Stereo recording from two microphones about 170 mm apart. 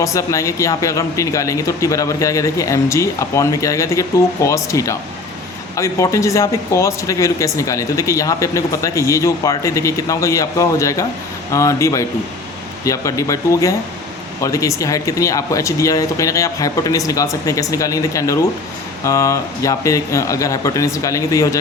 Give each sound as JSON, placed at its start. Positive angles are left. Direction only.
{"t": 0.0, "sound": "speech", "side_deg": 20}